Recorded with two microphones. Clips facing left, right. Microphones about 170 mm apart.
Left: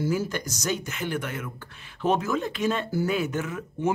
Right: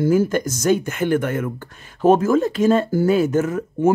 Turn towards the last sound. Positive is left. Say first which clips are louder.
# right 10 dB
turn(degrees=-45)  # may be behind; listen again after turning